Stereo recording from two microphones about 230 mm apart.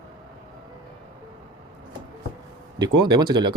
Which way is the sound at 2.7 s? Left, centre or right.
Centre.